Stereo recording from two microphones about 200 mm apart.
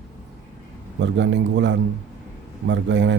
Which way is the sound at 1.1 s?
65° right (ahead or behind).